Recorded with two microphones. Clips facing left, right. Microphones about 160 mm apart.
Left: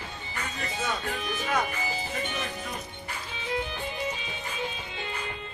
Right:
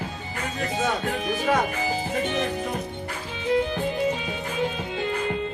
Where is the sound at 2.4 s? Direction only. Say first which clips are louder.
Right 8 dB; 50° right (ahead or behind).